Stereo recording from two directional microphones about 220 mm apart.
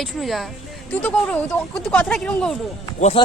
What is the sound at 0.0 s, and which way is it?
Speech, centre (ahead or behind).